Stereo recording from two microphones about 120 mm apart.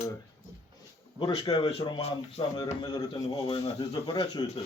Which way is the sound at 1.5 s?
55° left (ahead or behind).